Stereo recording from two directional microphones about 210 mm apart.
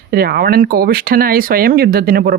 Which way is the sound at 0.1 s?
45° right (ahead or behind).